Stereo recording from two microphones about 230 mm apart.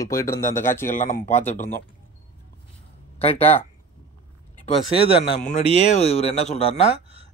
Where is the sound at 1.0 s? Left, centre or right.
Left.